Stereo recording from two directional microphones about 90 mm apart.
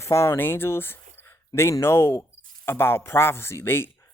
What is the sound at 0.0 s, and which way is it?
Speech, 30° left (ahead or behind).